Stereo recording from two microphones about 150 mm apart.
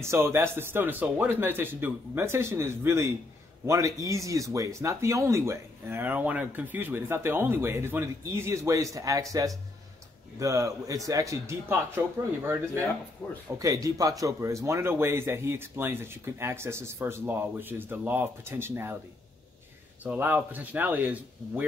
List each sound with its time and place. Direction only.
0.0 s speech: 15° right (ahead or behind)
13.6 s speech: 25° right (ahead or behind)
20.0 s speech: 10° right (ahead or behind)